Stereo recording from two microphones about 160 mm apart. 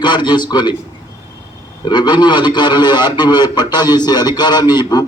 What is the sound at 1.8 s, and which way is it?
A man's voice, 30° left (ahead or behind).